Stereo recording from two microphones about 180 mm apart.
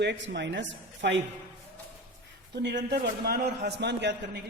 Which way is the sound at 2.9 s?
60° right (ahead or behind).